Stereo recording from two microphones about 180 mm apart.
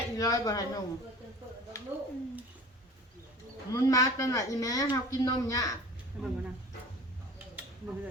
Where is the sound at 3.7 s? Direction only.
20° left (ahead or behind).